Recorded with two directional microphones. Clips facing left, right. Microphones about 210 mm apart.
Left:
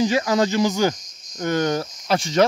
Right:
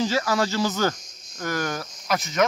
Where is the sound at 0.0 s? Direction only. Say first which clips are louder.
Left 4 dB; 20° left (ahead or behind).